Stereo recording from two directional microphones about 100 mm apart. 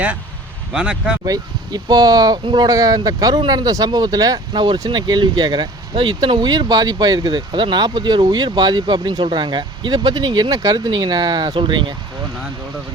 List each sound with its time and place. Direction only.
0.7 s speech: 10° right (ahead or behind)
1.2 s speech: 40° right (ahead or behind)
11.5 s speech: 55° right (ahead or behind)